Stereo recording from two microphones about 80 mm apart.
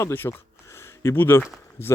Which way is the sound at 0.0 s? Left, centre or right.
Left.